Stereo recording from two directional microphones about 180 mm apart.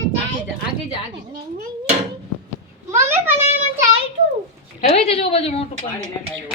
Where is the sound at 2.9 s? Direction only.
15° right (ahead or behind).